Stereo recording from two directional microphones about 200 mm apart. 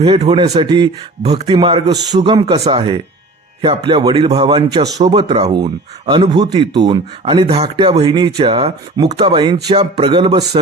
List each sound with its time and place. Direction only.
0.0 s speech: 25° right (ahead or behind)